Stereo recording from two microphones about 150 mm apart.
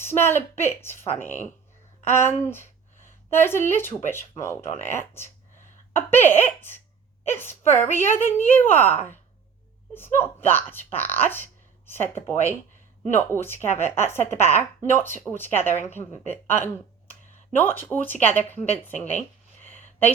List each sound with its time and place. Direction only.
0.0 s a woman's voice: 15° left (ahead or behind)
17.9 s a woman's voice: 10° left (ahead or behind)
19.7 s a sound: 10° left (ahead or behind)